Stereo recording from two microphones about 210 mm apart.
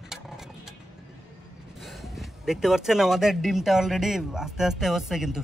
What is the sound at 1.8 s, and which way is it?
Speech, centre (ahead or behind).